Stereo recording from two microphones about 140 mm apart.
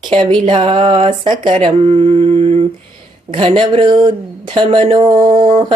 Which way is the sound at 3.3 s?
35° right (ahead or behind).